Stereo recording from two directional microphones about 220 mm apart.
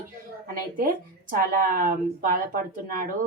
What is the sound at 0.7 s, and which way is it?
Speech, 40° right (ahead or behind).